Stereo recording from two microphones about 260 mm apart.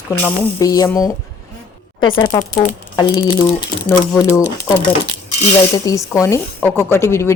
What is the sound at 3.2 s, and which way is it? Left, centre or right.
Speech, centre.